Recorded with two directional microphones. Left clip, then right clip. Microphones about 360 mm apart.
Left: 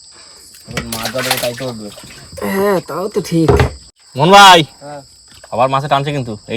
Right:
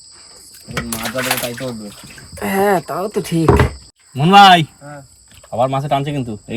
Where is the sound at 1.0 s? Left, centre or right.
Centre.